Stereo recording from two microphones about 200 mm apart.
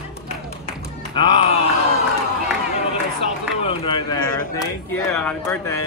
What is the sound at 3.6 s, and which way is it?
Speech, 25° left (ahead or behind).